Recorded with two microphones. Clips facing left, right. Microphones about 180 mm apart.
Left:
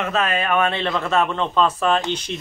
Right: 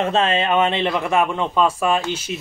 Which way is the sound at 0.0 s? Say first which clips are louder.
Right 3 dB; 30° right (ahead or behind).